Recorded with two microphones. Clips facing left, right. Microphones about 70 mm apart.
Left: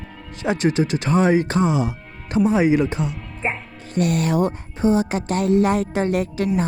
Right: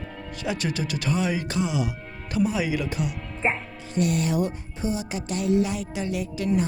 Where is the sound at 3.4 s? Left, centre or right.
Centre.